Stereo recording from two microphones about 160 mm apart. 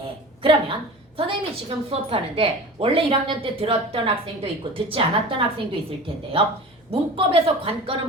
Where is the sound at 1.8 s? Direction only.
35° right (ahead or behind).